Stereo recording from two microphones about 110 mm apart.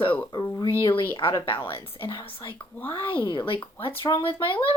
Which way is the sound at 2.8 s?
15° left (ahead or behind).